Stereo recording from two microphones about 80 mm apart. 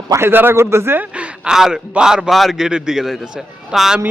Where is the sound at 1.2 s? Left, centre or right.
Centre.